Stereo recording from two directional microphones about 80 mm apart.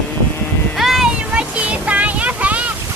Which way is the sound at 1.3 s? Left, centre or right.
Centre.